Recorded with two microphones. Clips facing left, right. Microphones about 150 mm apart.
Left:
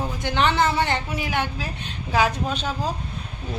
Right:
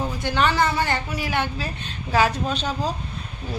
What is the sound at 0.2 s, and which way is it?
A man's voice, 20° left (ahead or behind).